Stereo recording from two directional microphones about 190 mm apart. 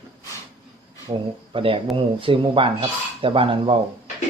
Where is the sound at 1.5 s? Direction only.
30° right (ahead or behind).